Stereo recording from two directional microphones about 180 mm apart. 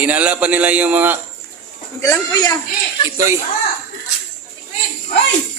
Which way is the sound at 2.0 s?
15° left (ahead or behind).